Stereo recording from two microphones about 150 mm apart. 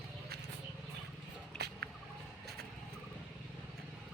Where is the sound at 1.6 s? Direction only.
90° right.